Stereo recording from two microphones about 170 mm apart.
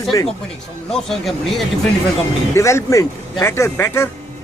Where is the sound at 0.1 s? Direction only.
25° left (ahead or behind).